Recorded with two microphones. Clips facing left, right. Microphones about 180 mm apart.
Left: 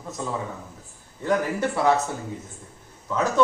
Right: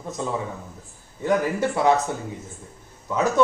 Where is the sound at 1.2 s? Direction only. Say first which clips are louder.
Right 2 dB; 15° right (ahead or behind).